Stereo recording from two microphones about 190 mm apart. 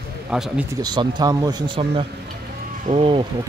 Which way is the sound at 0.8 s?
20° right (ahead or behind).